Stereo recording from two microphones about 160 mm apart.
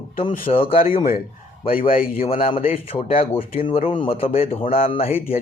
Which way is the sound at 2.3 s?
35° left (ahead or behind).